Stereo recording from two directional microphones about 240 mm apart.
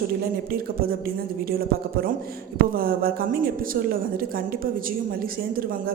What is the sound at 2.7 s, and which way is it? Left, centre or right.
A woman's voice, right.